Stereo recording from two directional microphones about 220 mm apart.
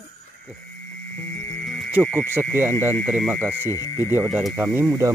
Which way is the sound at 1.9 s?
5° right (ahead or behind).